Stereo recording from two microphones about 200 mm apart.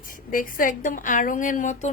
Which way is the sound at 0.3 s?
45° left (ahead or behind).